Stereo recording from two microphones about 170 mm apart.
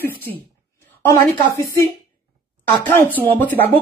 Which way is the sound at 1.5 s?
20° left (ahead or behind).